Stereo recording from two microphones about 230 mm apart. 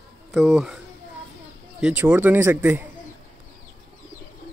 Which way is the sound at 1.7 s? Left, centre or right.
Centre.